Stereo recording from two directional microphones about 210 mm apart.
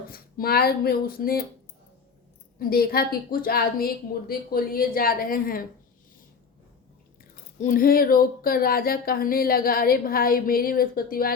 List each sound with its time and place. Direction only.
0.1 s speech: 45° left (ahead or behind)
2.6 s speech: 45° left (ahead or behind)
7.6 s speech: 40° left (ahead or behind)